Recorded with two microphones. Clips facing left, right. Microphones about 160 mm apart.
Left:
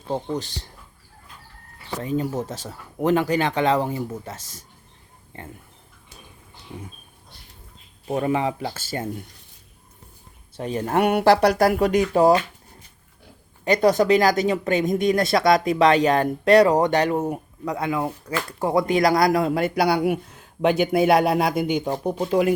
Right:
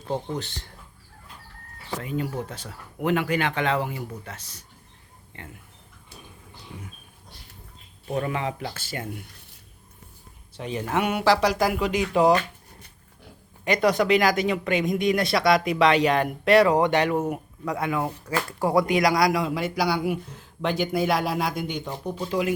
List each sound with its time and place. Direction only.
2.0 s speech: 35° left (ahead or behind)
8.0 s speech: 30° left (ahead or behind)
10.6 s speech: 45° left (ahead or behind)
13.7 s speech: 35° left (ahead or behind)
19.0 s a man's voice: 50° left (ahead or behind)
21.6 s speech: 80° left
21.9 s speech: 55° left (ahead or behind)